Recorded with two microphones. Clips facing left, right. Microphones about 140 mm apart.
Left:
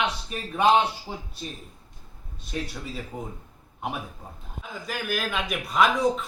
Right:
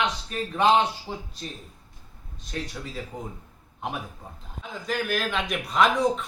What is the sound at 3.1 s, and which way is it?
Speech, 10° left (ahead or behind).